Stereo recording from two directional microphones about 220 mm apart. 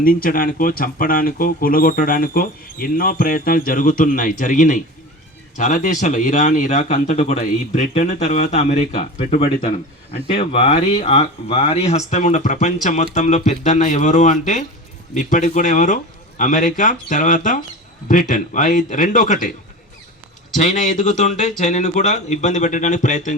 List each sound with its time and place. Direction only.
0.0 s speech: 40° left (ahead or behind)
20.6 s speech: 35° left (ahead or behind)